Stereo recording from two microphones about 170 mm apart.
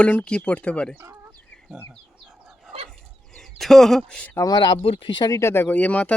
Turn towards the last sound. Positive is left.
turn(degrees=10)  # may be behind; listen again after turning